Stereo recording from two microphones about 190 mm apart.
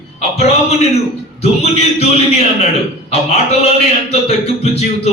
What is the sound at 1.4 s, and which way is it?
A man's voice, 35° left (ahead or behind).